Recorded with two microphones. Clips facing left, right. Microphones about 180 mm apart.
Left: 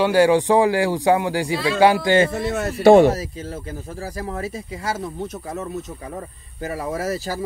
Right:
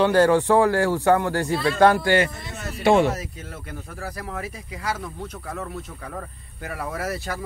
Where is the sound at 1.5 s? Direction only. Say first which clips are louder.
Left 1 dB; 90° left.